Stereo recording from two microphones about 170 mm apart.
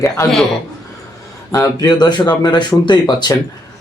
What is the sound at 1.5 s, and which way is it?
Speech, 20° left (ahead or behind).